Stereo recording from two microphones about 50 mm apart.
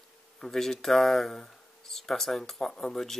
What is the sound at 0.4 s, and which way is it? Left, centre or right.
Speech, centre.